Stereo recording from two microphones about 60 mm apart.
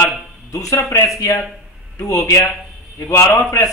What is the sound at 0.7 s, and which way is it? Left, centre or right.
Speech, left.